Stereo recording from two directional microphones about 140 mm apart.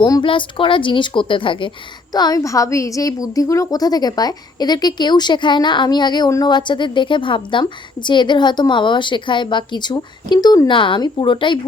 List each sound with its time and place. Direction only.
0.0 s a woman's voice: 35° left (ahead or behind)